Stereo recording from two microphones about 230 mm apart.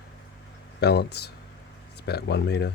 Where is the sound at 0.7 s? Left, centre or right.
Left.